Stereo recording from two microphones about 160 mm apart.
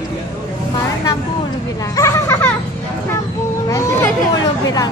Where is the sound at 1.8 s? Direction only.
20° left (ahead or behind).